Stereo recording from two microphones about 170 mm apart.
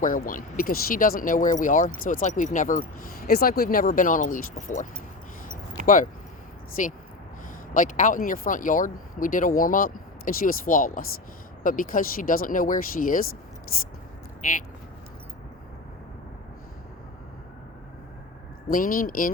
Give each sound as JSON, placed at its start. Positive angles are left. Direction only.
{"t": 0.0, "sound": "speech", "side_deg": 55}
{"t": 5.8, "sound": "speech", "side_deg": 50}
{"t": 18.7, "sound": "speech", "side_deg": 55}